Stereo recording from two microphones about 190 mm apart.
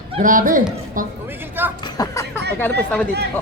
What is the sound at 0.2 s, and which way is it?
Speech, 45° right (ahead or behind).